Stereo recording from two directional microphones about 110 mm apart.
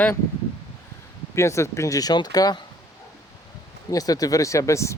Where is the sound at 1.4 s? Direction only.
25° left (ahead or behind).